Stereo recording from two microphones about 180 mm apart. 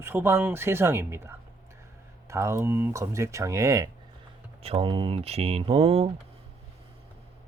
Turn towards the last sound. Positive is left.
turn(degrees=-30)  # may be behind; listen again after turning